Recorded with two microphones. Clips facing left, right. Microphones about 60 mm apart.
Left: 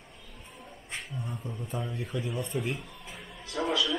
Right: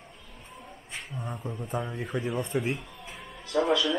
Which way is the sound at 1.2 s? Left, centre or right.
Right.